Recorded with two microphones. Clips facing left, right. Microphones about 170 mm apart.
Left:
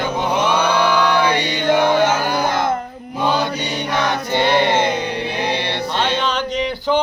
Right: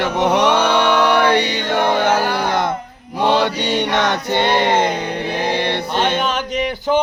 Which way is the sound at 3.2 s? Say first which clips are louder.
Right 3 dB; 70° right (ahead or behind).